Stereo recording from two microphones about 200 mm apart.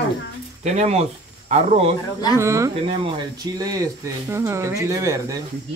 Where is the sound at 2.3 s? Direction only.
15° right (ahead or behind).